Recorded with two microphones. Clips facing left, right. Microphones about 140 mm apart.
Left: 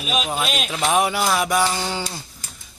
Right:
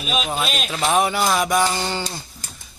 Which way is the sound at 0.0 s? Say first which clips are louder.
Even; 5° left (ahead or behind).